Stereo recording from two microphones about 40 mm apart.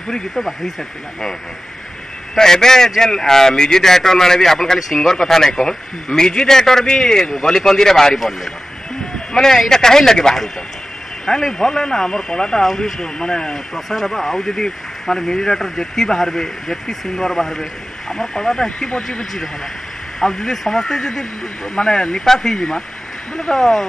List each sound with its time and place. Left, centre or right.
2.3 s speech: centre
9.3 s speech: centre
12.6 s speech: centre
13.0 s speech: centre
13.7 s speech: centre
20.2 s speech: centre
23.5 s speech: centre